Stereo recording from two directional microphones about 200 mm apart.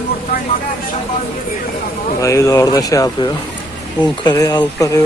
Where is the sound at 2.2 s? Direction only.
15° left (ahead or behind).